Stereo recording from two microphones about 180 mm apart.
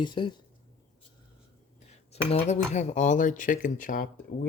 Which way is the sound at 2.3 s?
40° left (ahead or behind).